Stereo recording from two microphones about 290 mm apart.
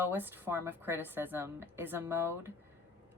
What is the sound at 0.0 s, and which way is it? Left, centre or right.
Speech, centre.